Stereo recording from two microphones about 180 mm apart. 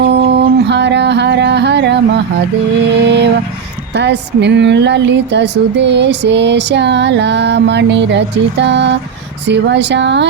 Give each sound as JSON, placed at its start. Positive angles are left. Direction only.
{"t": 0.0, "sound": "a sound", "side_deg": -70}
{"t": 2.9, "sound": "music", "side_deg": -70}
{"t": 3.9, "sound": "speech", "side_deg": -70}